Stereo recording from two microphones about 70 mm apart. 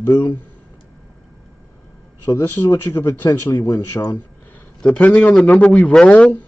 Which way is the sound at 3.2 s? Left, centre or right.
Left.